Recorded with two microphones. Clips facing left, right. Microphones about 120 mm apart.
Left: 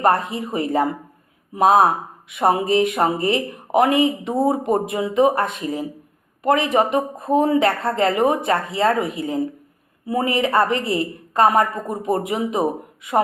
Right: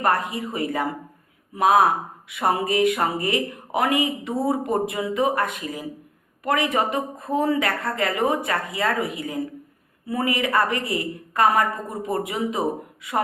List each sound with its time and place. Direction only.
0.0 s speech: 25° left (ahead or behind)